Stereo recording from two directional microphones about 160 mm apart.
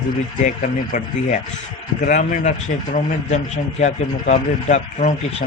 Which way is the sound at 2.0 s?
50° left (ahead or behind).